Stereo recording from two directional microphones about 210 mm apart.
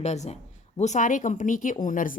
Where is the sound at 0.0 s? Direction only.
30° left (ahead or behind).